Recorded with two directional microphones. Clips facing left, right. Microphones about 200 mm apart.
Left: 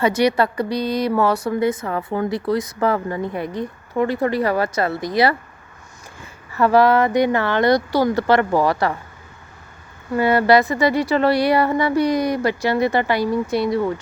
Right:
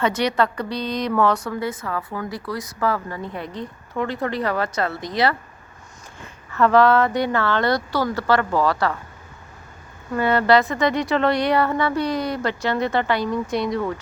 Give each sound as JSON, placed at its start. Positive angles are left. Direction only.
{"t": 0.0, "sound": "speech", "side_deg": 10}
{"t": 6.5, "sound": "speech", "side_deg": 10}
{"t": 10.1, "sound": "speech", "side_deg": 10}